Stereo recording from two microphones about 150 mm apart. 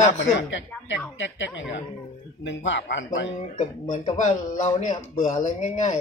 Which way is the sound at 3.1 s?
60° left (ahead or behind).